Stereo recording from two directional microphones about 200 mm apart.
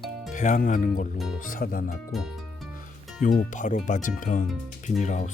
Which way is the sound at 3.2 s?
45° left (ahead or behind).